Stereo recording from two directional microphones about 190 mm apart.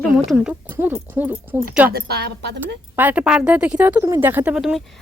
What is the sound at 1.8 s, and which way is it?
Speech, 55° right (ahead or behind).